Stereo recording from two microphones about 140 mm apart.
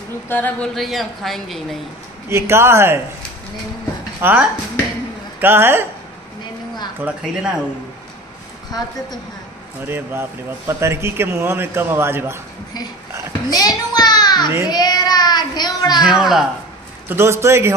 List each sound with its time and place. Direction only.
0.3 s a sound: 10° left (ahead or behind)
0.7 s a woman's voice: centre (ahead or behind)
2.2 s a man's voice: 20° right (ahead or behind)
4.2 s a man's voice: 15° right (ahead or behind)
7.0 s a man's voice: 5° right (ahead or behind)
9.8 s a man's voice: 15° right (ahead or behind)
13.5 s a sound: 25° left (ahead or behind)
14.7 s a child's voice: 30° left (ahead or behind)
16.1 s a woman's voice: 5° right (ahead or behind)
17.1 s a man's voice: 20° right (ahead or behind)